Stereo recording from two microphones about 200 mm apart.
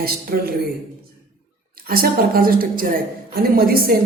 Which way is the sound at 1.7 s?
45° right (ahead or behind).